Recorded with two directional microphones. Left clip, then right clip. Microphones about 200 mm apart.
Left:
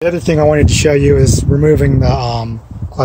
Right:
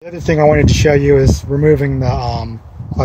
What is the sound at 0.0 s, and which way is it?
Speech, 10° left (ahead or behind).